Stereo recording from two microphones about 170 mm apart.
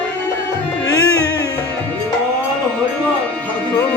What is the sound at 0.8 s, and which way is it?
Music, 20° left (ahead or behind).